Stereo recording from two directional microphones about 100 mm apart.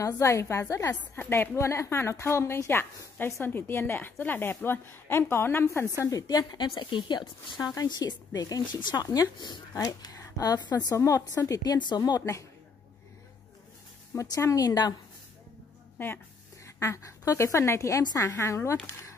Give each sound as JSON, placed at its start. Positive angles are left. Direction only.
{"t": 0.0, "sound": "a woman's voice", "side_deg": 30}
{"t": 5.9, "sound": "a woman's voice", "side_deg": 35}
{"t": 11.0, "sound": "speech", "side_deg": 30}
{"t": 14.1, "sound": "speech", "side_deg": 35}
{"t": 16.0, "sound": "a woman's voice", "side_deg": 25}